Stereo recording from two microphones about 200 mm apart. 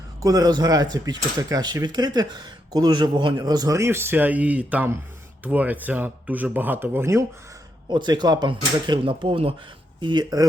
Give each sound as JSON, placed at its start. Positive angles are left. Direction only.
{"t": 0.2, "sound": "speech", "side_deg": -20}